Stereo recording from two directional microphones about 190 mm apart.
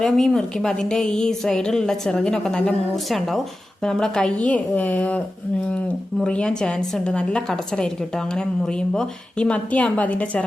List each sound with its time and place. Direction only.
0.0 s a woman's voice: centre (ahead or behind)